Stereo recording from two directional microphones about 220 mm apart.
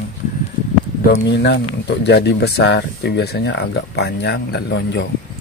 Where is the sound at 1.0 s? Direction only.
50° left (ahead or behind).